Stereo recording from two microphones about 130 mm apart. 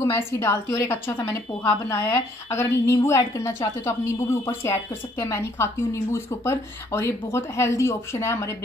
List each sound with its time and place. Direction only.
0.1 s a woman's voice: 20° left (ahead or behind)